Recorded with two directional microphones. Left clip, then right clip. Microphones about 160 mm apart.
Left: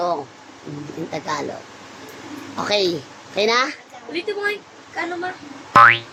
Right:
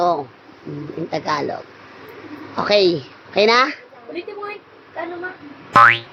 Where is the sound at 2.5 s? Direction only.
20° right (ahead or behind).